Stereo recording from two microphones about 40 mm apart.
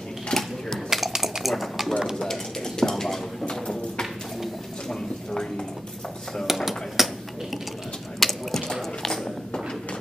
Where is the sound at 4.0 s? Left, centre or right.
Centre.